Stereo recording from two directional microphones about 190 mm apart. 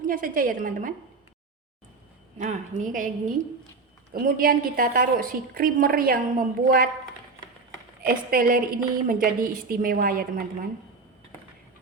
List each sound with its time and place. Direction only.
0.1 s a woman's voice: 45° right (ahead or behind)
2.4 s a woman's voice: 40° right (ahead or behind)
8.0 s a woman's voice: 50° right (ahead or behind)